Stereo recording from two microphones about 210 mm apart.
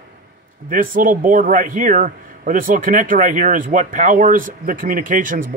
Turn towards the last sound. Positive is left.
turn(degrees=-40)  # may be behind; listen again after turning